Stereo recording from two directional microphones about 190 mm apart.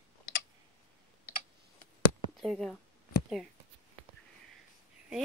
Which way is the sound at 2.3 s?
Centre (ahead or behind).